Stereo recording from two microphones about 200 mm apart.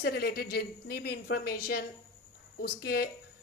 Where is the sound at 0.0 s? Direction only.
55° left (ahead or behind).